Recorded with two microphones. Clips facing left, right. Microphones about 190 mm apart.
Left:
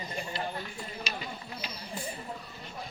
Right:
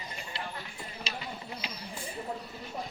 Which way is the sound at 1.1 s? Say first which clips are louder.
Right 1 dB; 30° right (ahead or behind).